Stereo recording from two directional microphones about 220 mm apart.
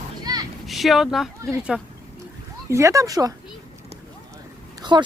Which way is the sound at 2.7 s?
15° right (ahead or behind).